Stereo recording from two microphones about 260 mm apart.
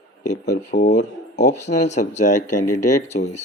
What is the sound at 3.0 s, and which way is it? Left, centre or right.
Speech, left.